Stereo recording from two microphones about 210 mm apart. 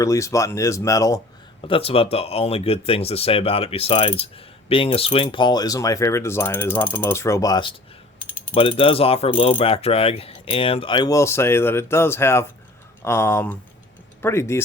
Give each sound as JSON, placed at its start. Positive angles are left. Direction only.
{"t": 0.0, "sound": "speech", "side_deg": 15}
{"t": 1.6, "sound": "speech", "side_deg": 25}